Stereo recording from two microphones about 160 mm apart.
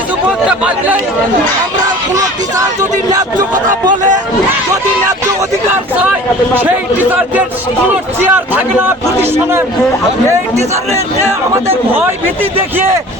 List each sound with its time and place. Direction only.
0.3 s speech: 5° right (ahead or behind)
6.5 s a man's voice: 10° right (ahead or behind)
10.6 s a man's voice: 40° right (ahead or behind)
11.9 s a man's voice: 15° right (ahead or behind)